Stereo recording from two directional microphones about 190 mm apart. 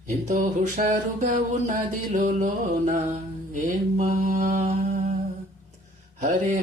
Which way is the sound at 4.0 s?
45° right (ahead or behind).